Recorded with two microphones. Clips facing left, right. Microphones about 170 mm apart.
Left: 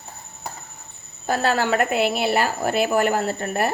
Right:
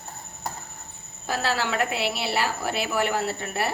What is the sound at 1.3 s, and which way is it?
A woman's voice, 50° left (ahead or behind).